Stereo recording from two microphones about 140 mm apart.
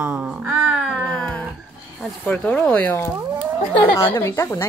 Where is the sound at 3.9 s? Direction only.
20° left (ahead or behind).